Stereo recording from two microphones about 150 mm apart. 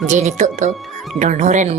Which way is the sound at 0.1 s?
55° right (ahead or behind).